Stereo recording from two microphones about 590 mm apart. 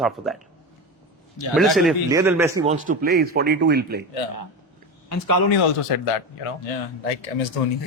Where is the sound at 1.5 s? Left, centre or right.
Centre.